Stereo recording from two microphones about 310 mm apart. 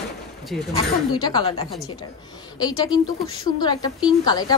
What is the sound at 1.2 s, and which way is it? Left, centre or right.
A woman's voice, centre.